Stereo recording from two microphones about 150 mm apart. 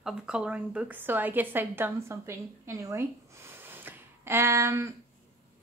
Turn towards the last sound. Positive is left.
turn(degrees=-20)  # may be behind; listen again after turning